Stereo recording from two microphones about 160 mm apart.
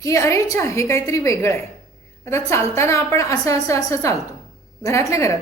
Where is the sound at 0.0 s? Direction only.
20° left (ahead or behind).